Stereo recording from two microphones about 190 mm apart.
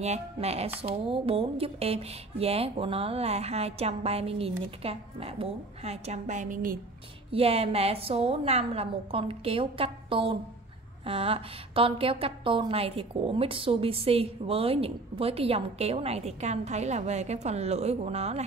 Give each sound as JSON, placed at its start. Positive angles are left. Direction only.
{"t": 0.0, "sound": "a woman's voice", "side_deg": -35}
{"t": 7.2, "sound": "a woman's voice", "side_deg": -30}